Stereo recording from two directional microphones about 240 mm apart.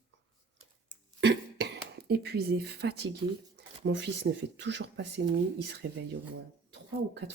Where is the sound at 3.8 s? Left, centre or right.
Right.